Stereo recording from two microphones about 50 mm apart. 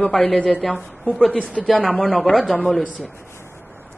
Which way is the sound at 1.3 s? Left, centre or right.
Left.